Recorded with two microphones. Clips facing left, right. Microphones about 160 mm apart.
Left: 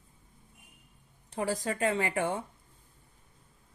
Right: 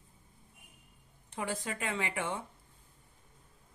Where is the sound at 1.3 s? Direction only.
40° left (ahead or behind).